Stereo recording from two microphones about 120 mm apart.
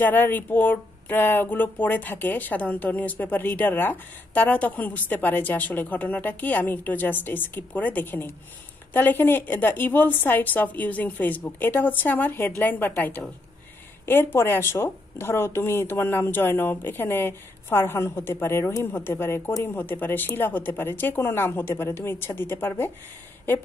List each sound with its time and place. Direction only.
0.0 s speech: 15° left (ahead or behind)